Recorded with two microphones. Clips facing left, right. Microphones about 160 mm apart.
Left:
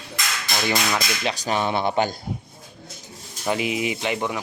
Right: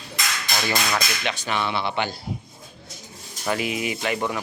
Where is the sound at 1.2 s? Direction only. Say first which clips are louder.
Left 3 dB; 35° left (ahead or behind).